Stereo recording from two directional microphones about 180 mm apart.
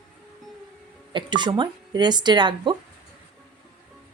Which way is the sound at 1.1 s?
25° right (ahead or behind).